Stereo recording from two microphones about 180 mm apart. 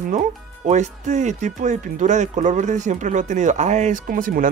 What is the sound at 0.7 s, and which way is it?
Speech, 40° right (ahead or behind).